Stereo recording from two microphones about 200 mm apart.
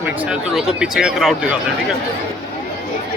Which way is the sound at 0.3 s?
5° right (ahead or behind).